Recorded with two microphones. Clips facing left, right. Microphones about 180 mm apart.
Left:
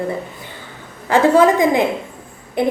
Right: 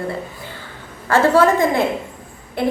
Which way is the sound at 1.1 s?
15° left (ahead or behind).